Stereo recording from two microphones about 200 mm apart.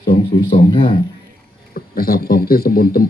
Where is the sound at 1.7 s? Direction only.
50° left (ahead or behind).